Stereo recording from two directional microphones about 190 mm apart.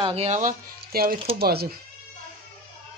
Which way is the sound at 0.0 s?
30° right (ahead or behind).